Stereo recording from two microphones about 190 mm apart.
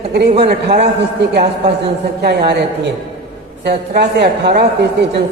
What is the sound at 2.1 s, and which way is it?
A woman's voice, 60° right (ahead or behind).